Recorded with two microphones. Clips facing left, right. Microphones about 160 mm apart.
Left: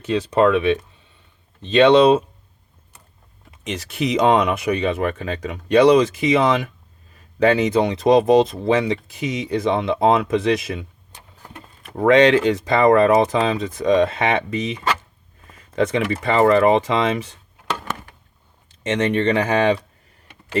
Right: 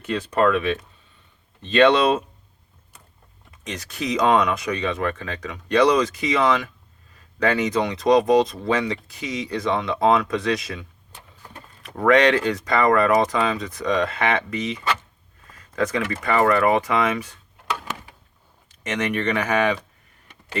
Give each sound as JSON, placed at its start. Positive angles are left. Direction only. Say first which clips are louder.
{"t": 0.1, "sound": "speech", "louder": "left 4 dB", "side_deg": 20}
{"t": 3.7, "sound": "speech", "louder": "left 4 dB", "side_deg": 25}
{"t": 11.9, "sound": "speech", "louder": "left 3 dB", "side_deg": 25}
{"t": 18.7, "sound": "speech", "louder": "left 5 dB", "side_deg": 30}